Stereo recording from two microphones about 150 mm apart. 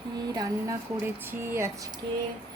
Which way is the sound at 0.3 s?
15° right (ahead or behind).